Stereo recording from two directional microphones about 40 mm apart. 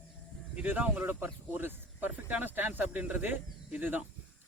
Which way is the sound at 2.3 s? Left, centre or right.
Right.